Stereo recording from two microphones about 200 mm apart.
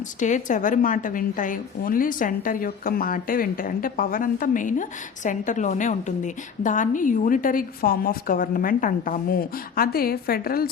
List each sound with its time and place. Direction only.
0.2 s a woman's voice: 40° left (ahead or behind)